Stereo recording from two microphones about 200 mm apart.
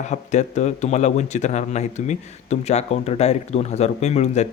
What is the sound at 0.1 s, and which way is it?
Speech, 35° left (ahead or behind).